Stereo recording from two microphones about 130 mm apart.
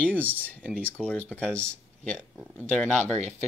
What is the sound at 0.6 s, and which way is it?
Speech, 10° right (ahead or behind).